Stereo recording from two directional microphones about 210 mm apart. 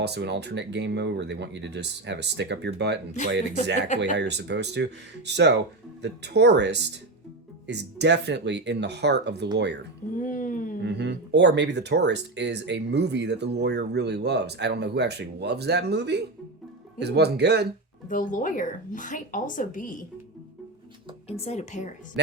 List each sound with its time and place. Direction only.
0.0 s speech: 50° right (ahead or behind)
3.8 s a woman's voice: 35° left (ahead or behind)
4.2 s speech: 55° right (ahead or behind)
10.2 s a sound: 40° left (ahead or behind)
10.8 s speech: 55° right (ahead or behind)
18.1 s a woman's voice: 40° left (ahead or behind)
21.2 s a woman's voice: 30° left (ahead or behind)